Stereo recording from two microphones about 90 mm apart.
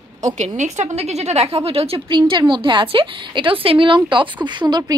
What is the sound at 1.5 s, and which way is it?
A woman's voice, 90° right.